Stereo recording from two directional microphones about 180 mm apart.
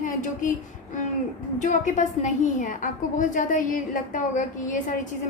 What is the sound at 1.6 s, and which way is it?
A woman's voice, 45° left (ahead or behind).